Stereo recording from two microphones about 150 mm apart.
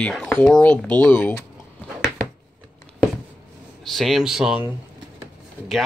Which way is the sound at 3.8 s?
Centre (ahead or behind).